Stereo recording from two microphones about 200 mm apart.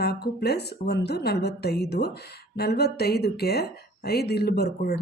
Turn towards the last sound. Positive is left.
turn(degrees=50)  # may be behind; listen again after turning